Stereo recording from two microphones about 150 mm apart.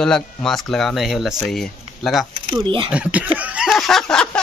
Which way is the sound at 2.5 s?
35° right (ahead or behind).